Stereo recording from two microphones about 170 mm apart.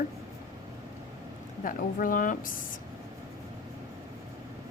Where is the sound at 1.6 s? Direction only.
55° left (ahead or behind).